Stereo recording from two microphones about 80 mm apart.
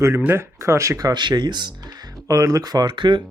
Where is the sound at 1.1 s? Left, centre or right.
Right.